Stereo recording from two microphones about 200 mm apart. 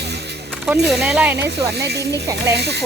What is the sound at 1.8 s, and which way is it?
Speech, 55° right (ahead or behind).